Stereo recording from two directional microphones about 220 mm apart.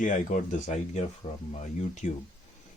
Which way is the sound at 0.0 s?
35° left (ahead or behind).